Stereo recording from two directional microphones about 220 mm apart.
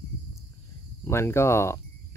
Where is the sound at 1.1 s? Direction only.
10° left (ahead or behind).